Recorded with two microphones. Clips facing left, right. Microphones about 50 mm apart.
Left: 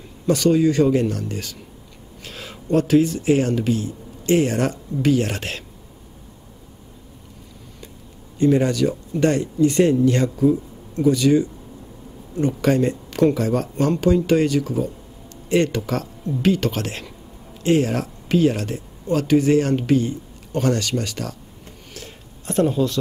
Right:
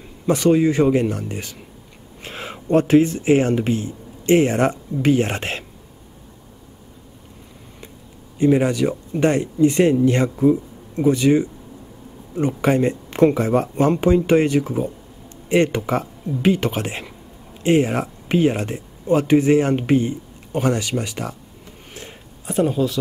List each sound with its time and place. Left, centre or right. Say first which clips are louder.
0.3 s speech: right 1 dB; right
8.4 s speech: right 1 dB; centre
22.5 s speech: even; centre